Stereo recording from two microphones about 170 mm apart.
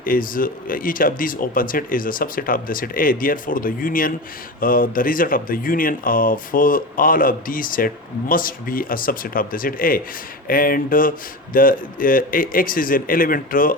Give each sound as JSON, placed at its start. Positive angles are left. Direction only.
{"t": 0.0, "sound": "speech", "side_deg": 55}